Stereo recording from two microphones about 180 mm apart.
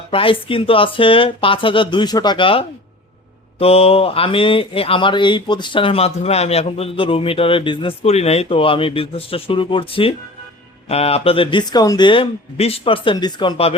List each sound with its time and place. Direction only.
0.1 s speech: 30° left (ahead or behind)